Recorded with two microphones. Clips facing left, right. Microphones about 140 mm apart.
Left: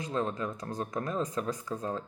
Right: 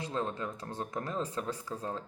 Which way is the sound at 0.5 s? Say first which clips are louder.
Left 3 dB; 30° right (ahead or behind).